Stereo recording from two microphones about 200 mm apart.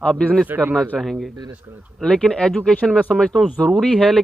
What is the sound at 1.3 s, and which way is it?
Speech, 20° right (ahead or behind).